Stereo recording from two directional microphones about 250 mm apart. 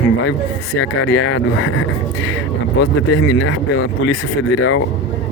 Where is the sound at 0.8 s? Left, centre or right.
Left.